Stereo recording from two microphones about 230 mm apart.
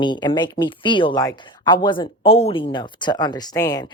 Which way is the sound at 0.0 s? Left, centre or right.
Centre.